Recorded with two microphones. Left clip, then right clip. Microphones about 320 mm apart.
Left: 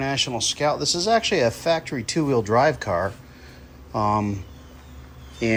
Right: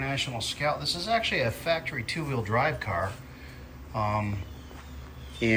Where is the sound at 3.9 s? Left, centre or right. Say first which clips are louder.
Left 7 dB; left.